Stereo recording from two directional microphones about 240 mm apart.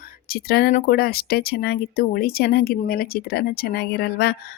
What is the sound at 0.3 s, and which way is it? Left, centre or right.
Speech, left.